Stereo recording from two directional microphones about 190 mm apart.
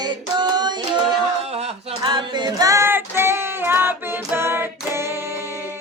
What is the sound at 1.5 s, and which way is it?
A capella, 35° right (ahead or behind).